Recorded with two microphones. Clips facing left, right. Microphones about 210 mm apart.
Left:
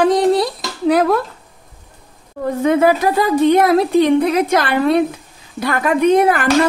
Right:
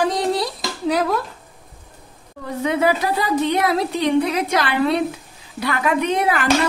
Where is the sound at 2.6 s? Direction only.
50° left (ahead or behind).